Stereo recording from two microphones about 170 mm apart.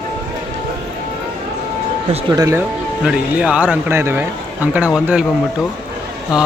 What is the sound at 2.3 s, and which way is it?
Speech, 20° right (ahead or behind).